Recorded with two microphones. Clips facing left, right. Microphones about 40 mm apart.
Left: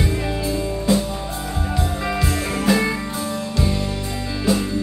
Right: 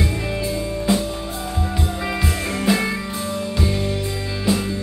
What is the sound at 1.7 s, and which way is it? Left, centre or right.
Music, centre.